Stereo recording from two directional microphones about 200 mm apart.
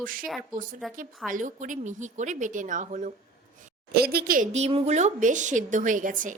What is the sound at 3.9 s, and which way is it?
A woman's voice, 50° right (ahead or behind).